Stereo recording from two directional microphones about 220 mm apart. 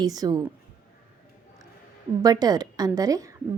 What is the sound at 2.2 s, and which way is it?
A woman's voice, 15° right (ahead or behind).